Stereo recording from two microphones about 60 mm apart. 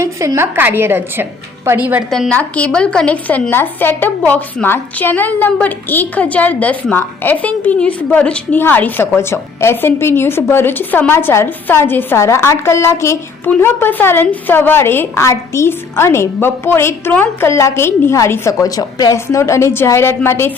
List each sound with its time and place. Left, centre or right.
0.3 s a woman's voice: right
2.3 s a woman's voice: left
3.5 s a woman's voice: left
8.5 s a woman's voice: left
9.1 s a woman's voice: left
12.1 s a woman's voice: left
13.6 s a woman's voice: left
18.6 s a woman's voice: left
19.1 s a woman's voice: left